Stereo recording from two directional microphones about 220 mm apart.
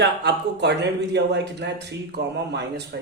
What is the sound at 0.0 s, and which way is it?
Speech, 50° right (ahead or behind).